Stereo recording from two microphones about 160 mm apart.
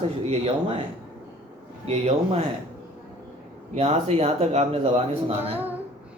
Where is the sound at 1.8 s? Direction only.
40° right (ahead or behind).